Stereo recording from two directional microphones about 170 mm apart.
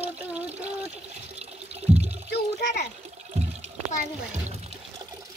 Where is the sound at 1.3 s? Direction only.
40° right (ahead or behind).